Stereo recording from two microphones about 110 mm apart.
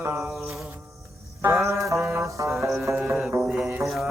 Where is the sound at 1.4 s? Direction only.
25° right (ahead or behind).